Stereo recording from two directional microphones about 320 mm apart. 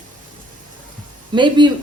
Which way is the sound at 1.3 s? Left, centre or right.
Centre.